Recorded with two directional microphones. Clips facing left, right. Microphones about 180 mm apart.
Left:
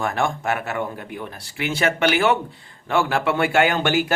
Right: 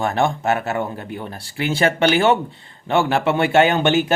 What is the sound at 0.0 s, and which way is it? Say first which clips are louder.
Speech: right 4 dB; 25° right (ahead or behind).